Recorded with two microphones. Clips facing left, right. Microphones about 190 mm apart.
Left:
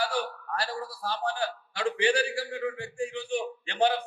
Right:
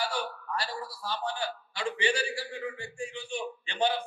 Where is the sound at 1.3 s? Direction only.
60° left (ahead or behind).